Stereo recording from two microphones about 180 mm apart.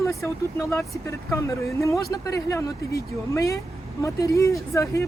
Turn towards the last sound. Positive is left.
turn(degrees=15)  # may be behind; listen again after turning